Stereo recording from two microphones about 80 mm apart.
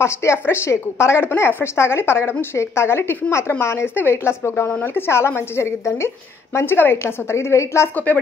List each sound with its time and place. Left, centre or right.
0.0 s a woman's voice: left